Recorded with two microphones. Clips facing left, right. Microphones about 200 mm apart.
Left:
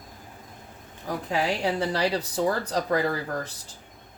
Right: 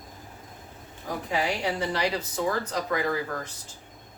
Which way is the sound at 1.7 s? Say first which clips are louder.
Left 2 dB; 35° left (ahead or behind).